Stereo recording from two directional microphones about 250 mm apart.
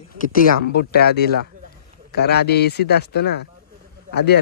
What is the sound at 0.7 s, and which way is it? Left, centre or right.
Speech, left.